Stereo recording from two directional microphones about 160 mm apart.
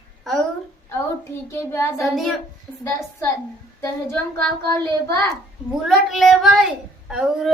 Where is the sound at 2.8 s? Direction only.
15° left (ahead or behind).